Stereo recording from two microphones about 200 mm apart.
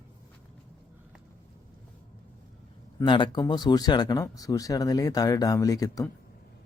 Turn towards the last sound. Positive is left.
turn(degrees=15)  # may be behind; listen again after turning